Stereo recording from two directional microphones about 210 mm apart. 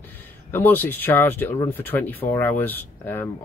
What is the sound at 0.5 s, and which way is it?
Speech, 10° left (ahead or behind).